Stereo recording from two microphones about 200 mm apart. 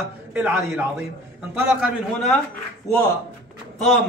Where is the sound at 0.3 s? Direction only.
10° right (ahead or behind).